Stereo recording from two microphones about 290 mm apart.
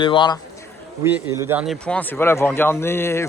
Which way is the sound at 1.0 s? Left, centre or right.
Centre.